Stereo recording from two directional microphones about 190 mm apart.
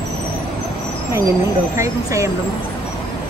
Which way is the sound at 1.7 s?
15° right (ahead or behind).